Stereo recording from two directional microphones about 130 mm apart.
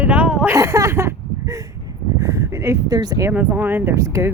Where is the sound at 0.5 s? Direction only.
25° right (ahead or behind).